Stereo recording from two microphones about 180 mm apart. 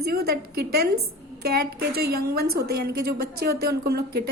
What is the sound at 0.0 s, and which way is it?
Speech, 60° right (ahead or behind).